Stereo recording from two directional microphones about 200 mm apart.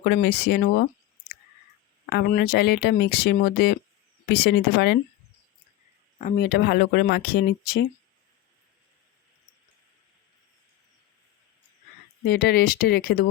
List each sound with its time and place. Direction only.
0.0 s speech: 50° left (ahead or behind)
2.0 s speech: 50° left (ahead or behind)
6.1 s speech: 45° left (ahead or behind)
12.2 s speech: 50° left (ahead or behind)